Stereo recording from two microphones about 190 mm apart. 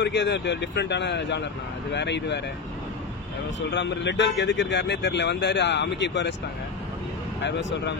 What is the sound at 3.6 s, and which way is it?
Speech, 70° left (ahead or behind).